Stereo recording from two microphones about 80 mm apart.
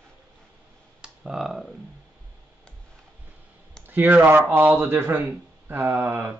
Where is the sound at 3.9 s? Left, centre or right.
Right.